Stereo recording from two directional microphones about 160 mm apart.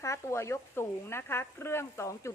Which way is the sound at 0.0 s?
15° left (ahead or behind).